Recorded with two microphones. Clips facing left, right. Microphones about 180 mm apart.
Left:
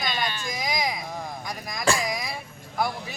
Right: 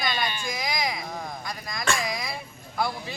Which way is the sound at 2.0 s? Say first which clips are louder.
Left 1 dB; 15° left (ahead or behind).